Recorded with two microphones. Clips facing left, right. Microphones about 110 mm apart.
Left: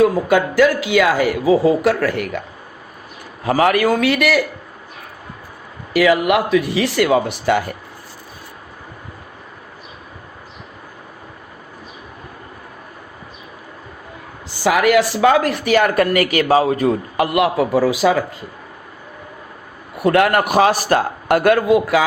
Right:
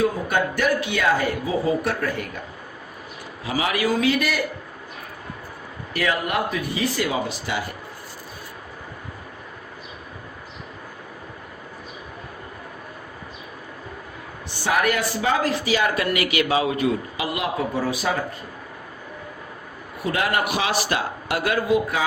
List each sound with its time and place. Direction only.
0.0 s speech: 90° left
3.4 s a man's voice: 55° left (ahead or behind); by 4.4 s 75° left (ahead or behind)
5.9 s speech: 90° left; by 7.6 s 60° left (ahead or behind)
14.6 s speech: 90° left; by 16.0 s 55° left (ahead or behind)
16.0 s a man's voice: 45° left (ahead or behind)
17.2 s speech: 60° left (ahead or behind); by 18.3 s 90° left
20.0 s a man's voice: 60° left (ahead or behind)